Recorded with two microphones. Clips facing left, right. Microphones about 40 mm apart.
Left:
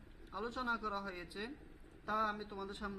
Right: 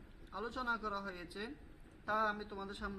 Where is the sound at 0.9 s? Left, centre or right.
Left.